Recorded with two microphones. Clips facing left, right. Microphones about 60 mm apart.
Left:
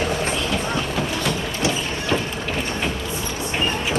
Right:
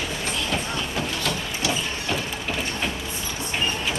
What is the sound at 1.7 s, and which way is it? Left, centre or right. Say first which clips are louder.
Mechanisms: left 2 dB; centre.